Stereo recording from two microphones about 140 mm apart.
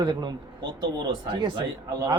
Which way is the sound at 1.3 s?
35° right (ahead or behind).